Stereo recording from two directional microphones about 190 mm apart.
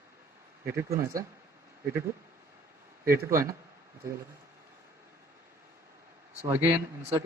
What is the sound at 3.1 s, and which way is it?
Speech, 15° right (ahead or behind).